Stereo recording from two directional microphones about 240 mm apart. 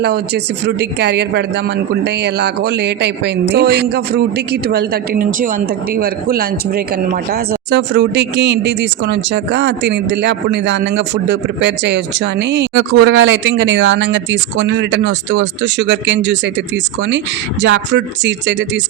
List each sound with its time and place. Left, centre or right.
0.0 s speech: right